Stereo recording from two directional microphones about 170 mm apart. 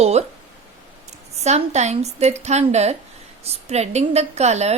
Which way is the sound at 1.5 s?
40° right (ahead or behind).